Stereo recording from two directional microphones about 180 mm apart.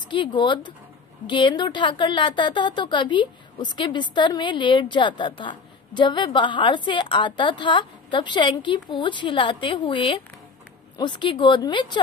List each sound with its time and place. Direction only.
0.1 s a woman's voice: 25° left (ahead or behind)